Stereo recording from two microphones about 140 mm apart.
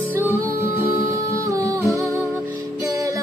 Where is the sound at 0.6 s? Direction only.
15° right (ahead or behind).